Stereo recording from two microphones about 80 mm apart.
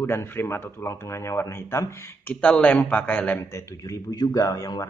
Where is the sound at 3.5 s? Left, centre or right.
Left.